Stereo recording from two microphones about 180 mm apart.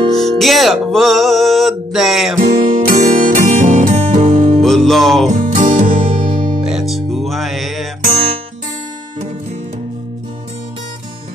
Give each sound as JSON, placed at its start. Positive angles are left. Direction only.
{"t": 0.1, "sound": "music", "side_deg": 0}
{"t": 2.4, "sound": "music", "side_deg": -45}
{"t": 4.6, "sound": "music", "side_deg": 0}
{"t": 5.3, "sound": "music", "side_deg": -45}
{"t": 5.9, "sound": "music", "side_deg": -30}
{"t": 6.6, "sound": "music", "side_deg": 0}